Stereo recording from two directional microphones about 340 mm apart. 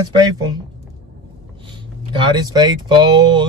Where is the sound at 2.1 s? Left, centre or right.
Centre.